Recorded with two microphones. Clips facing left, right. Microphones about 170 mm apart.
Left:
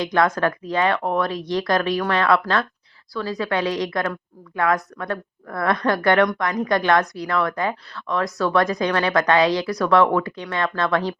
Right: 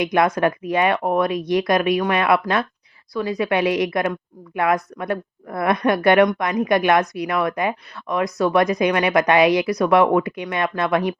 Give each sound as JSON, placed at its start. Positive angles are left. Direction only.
{"t": 0.0, "sound": "a woman's voice", "side_deg": -20}